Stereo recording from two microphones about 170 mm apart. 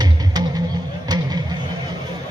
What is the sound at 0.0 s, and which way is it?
Music, 20° right (ahead or behind).